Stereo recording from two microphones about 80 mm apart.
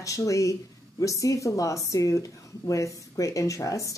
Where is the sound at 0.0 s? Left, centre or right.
Left.